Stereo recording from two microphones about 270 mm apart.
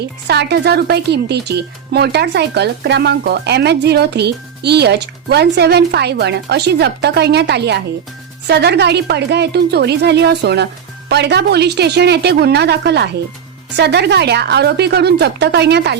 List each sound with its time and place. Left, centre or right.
0.0 s speech: right